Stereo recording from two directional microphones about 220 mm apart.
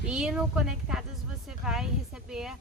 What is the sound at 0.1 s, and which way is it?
Speech, 5° right (ahead or behind).